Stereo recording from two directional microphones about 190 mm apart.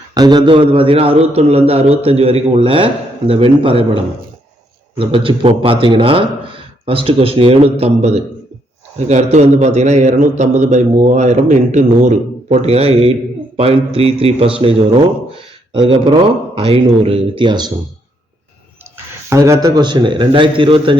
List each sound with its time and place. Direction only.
0.1 s a man's voice: 20° right (ahead or behind)
15.3 s a sound: 25° right (ahead or behind)
16.6 s a man's voice: 30° right (ahead or behind)
19.3 s a man's voice: 15° right (ahead or behind)